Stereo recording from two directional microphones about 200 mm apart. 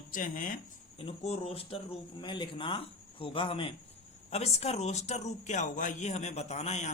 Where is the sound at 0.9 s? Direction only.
30° left (ahead or behind).